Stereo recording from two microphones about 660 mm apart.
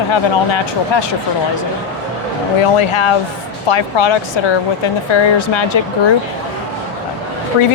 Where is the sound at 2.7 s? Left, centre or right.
Left.